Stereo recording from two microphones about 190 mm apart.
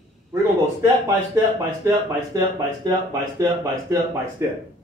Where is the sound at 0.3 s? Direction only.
15° right (ahead or behind).